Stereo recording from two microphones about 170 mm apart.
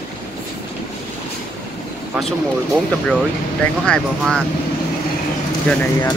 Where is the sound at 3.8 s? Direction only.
5° left (ahead or behind).